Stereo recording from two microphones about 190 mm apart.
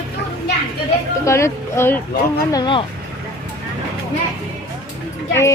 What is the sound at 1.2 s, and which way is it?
Speech, 15° left (ahead or behind).